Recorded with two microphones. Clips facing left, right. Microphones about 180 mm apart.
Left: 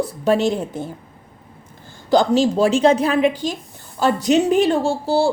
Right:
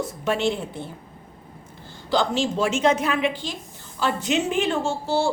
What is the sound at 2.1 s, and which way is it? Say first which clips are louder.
A woman's voice: left 7 dB; 40° left (ahead or behind).